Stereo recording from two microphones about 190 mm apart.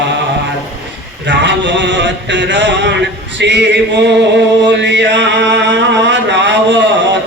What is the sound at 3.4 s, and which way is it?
Speech, 65° right (ahead or behind).